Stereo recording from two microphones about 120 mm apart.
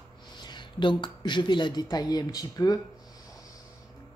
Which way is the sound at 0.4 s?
40° left (ahead or behind).